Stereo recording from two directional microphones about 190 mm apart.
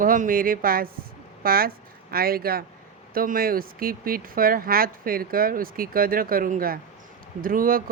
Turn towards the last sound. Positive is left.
turn(degrees=-50)  # may be behind; listen again after turning